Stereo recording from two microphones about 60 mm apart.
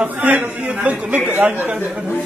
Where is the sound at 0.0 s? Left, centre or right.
Right.